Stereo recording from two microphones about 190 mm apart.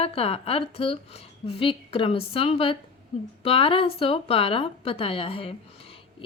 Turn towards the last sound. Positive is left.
turn(degrees=30)  # may be behind; listen again after turning